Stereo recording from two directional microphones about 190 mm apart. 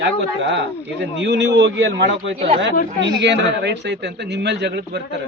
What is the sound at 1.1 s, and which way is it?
A man's voice, 70° right (ahead or behind).